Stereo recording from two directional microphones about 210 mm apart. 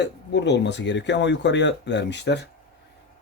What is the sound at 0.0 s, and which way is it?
Speech, 55° left (ahead or behind).